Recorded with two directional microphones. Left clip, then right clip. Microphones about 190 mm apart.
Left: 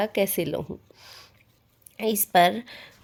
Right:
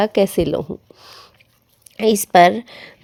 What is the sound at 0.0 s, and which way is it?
Speech, 30° right (ahead or behind).